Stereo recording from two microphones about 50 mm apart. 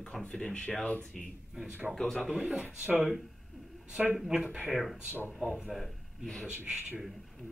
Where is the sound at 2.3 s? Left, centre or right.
Centre.